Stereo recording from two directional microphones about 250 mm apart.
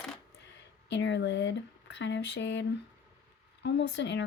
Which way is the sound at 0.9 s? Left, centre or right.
Left.